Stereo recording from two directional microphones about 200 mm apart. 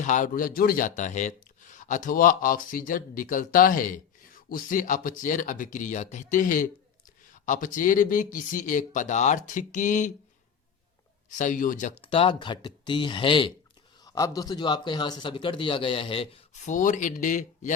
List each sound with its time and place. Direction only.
0.0 s speech: 40° left (ahead or behind)
11.3 s a man's voice: 40° left (ahead or behind)